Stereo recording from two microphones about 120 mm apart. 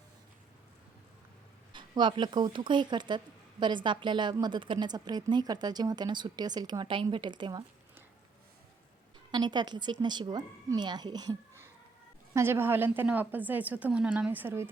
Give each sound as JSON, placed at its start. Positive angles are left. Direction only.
{"t": 1.7, "sound": "a woman's voice", "side_deg": -40}
{"t": 9.3, "sound": "a woman's voice", "side_deg": -35}
{"t": 12.3, "sound": "a woman's voice", "side_deg": -20}